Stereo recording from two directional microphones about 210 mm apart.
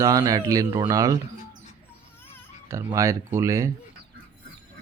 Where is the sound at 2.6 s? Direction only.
15° right (ahead or behind).